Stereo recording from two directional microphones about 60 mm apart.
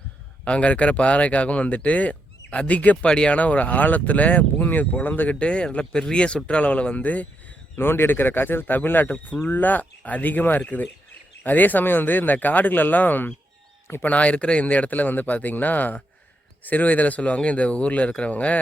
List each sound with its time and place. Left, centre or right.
0.4 s speech: centre
5.4 s speech: centre
7.8 s speech: left